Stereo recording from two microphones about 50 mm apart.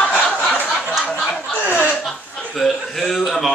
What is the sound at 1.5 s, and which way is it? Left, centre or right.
Speech, left.